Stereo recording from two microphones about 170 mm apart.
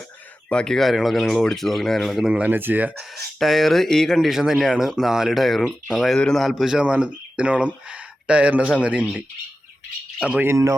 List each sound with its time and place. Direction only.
0.5 s speech: 5° left (ahead or behind)
3.0 s speech: centre (ahead or behind); by 10.8 s 15° right (ahead or behind)